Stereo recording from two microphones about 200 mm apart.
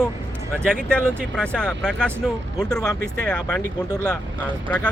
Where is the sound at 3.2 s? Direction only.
5° left (ahead or behind).